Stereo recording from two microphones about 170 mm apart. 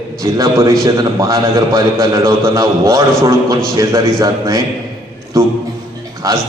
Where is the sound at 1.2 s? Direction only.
20° right (ahead or behind).